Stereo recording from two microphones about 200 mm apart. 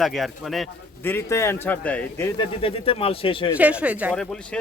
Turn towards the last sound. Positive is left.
turn(degrees=5)  # may be behind; listen again after turning